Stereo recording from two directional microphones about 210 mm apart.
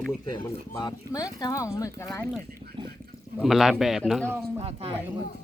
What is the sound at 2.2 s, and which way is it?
A man's voice, centre (ahead or behind).